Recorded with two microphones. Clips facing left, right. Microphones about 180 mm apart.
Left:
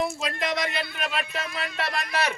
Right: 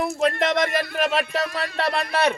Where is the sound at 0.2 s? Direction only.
55° right (ahead or behind).